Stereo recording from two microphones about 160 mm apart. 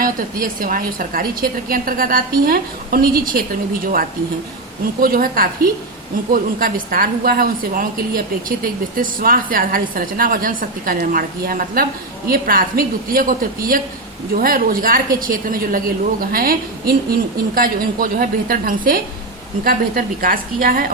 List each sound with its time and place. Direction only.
0.4 s a woman's voice: 65° right (ahead or behind)